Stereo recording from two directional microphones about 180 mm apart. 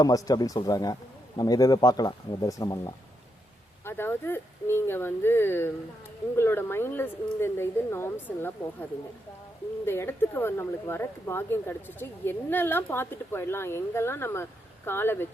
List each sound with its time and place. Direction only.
0.0 s speech: 20° left (ahead or behind)
9.8 s speech: 15° left (ahead or behind)